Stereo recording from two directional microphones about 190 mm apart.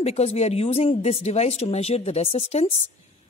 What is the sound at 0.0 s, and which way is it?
A man's voice, 35° left (ahead or behind).